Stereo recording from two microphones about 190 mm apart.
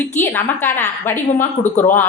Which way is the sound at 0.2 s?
10° left (ahead or behind).